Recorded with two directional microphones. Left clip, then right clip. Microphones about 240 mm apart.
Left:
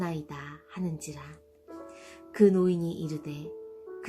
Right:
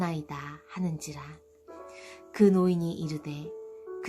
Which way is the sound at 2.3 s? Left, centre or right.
Centre.